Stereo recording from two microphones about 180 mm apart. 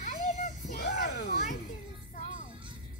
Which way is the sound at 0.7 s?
55° left (ahead or behind).